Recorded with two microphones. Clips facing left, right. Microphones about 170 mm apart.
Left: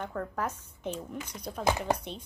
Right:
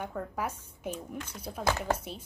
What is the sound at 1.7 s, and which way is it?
Speech, 15° left (ahead or behind).